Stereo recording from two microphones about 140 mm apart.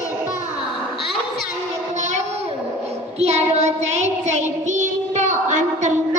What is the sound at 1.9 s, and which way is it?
Child singing, 60° right (ahead or behind).